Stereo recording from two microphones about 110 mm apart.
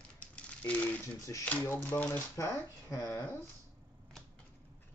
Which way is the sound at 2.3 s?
30° left (ahead or behind).